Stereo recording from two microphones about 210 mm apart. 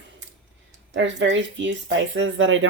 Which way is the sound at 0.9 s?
60° right (ahead or behind).